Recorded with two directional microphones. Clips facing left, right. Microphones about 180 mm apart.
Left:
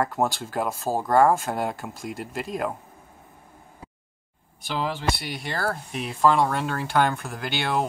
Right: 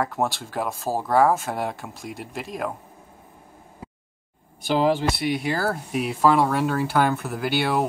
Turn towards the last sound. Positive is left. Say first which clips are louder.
# right 3 dB
turn(degrees=-5)  # may be behind; listen again after turning